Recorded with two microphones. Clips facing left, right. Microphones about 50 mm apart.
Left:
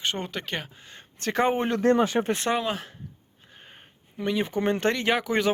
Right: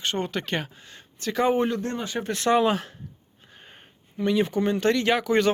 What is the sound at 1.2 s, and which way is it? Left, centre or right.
Speech, left.